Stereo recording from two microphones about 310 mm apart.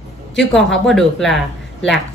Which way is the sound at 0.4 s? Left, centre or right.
Centre.